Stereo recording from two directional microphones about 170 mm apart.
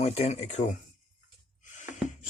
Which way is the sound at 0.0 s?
35° left (ahead or behind).